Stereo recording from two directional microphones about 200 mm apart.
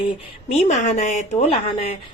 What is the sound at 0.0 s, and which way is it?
A woman's voice, 35° left (ahead or behind).